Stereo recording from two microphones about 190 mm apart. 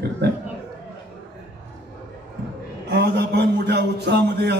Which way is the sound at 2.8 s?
60° right (ahead or behind).